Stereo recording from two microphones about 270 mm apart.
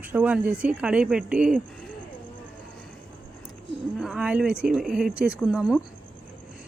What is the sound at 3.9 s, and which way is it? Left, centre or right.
A woman's voice, centre.